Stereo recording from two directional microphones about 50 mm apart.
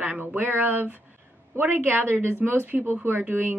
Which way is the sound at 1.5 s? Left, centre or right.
Right.